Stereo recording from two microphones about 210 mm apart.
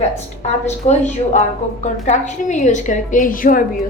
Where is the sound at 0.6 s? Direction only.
30° left (ahead or behind).